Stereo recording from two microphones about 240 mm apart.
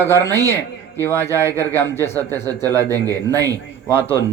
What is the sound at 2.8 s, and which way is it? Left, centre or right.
A man's voice, centre.